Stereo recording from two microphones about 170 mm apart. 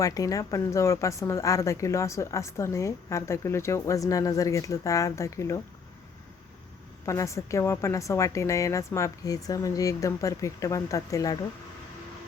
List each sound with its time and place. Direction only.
0.0 s speech: 20° left (ahead or behind)
7.0 s speech: 15° left (ahead or behind)